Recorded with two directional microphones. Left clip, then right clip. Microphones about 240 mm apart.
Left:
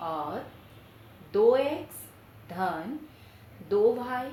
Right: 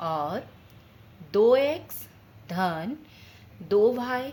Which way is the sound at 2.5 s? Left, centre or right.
Right.